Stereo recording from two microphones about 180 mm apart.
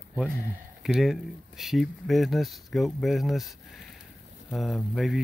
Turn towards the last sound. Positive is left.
turn(degrees=0)  # may be behind; listen again after turning